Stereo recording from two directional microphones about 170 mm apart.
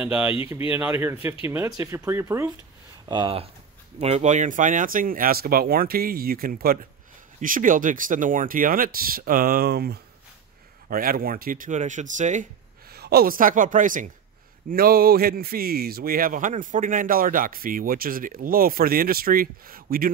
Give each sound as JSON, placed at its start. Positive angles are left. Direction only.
{"t": 0.0, "sound": "speech", "side_deg": -10}
{"t": 3.1, "sound": "speech", "side_deg": -30}
{"t": 4.0, "sound": "speech", "side_deg": -40}
{"t": 10.9, "sound": "speech", "side_deg": -60}
{"t": 12.9, "sound": "speech", "side_deg": -70}
{"t": 14.7, "sound": "speech", "side_deg": -60}